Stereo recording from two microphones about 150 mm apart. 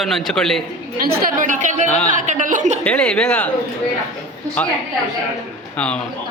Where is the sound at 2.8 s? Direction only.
5° left (ahead or behind).